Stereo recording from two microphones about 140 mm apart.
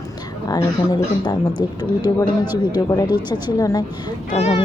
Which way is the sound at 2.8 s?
25° left (ahead or behind).